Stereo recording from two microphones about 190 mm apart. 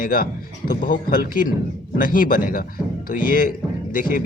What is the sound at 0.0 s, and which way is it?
Speech, 50° left (ahead or behind).